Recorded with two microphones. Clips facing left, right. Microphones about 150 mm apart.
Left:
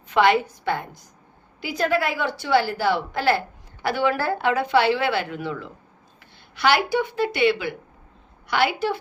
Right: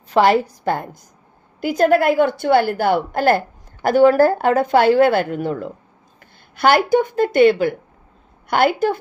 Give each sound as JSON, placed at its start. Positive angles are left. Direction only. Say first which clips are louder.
{"t": 0.1, "sound": "a woman's voice", "louder": "right 4 dB", "side_deg": -35}